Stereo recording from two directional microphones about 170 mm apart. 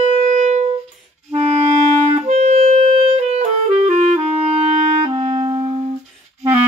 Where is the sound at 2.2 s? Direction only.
40° right (ahead or behind).